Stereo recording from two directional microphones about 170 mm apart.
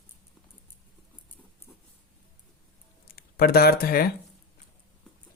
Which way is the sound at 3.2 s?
65° left (ahead or behind).